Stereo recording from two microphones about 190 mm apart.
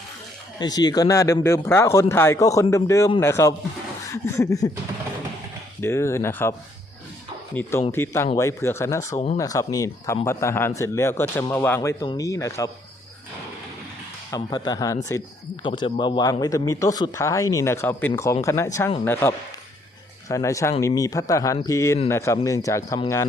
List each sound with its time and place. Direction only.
0.6 s a man's voice: 20° left (ahead or behind)
4.1 s a sound: 15° left (ahead or behind)
5.8 s a man's voice: 15° left (ahead or behind)
7.9 s a man's voice: 15° left (ahead or behind)
9.1 s speech: 35° left (ahead or behind)
9.4 s a man's voice: 20° left (ahead or behind)
14.3 s a man's voice: 20° left (ahead or behind)